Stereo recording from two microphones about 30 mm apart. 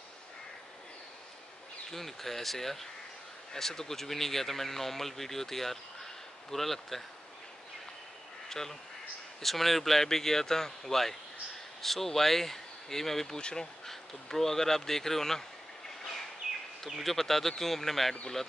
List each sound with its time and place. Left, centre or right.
1.9 s speech: centre
8.5 s speech: centre
13.4 s speech: left
13.8 s speech: centre
16.9 s speech: centre